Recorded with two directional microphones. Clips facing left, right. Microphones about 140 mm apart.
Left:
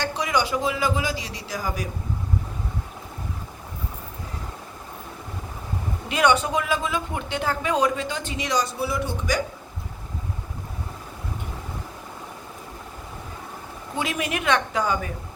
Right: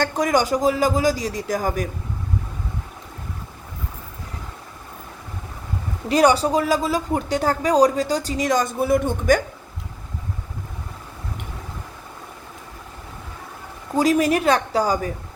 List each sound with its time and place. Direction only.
0.0 s a man's voice: 45° right (ahead or behind)
6.1 s speech: 35° right (ahead or behind)
13.9 s speech: 40° right (ahead or behind)